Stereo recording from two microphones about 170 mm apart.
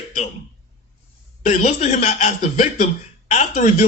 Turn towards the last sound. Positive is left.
turn(degrees=45)  # may be behind; listen again after turning